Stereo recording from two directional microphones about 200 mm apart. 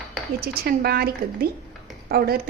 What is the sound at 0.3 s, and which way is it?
A woman's voice, 50° right (ahead or behind).